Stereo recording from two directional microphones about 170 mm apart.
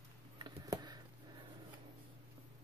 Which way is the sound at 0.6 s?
20° right (ahead or behind).